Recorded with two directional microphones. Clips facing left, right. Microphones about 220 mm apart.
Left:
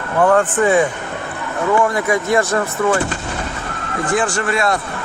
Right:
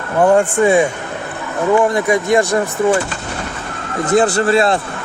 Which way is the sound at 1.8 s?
15° right (ahead or behind).